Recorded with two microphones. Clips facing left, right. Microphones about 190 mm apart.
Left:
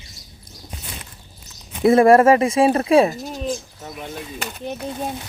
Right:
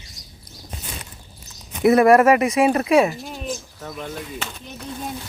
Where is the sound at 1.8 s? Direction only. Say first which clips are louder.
Left 1 dB; 30° left (ahead or behind).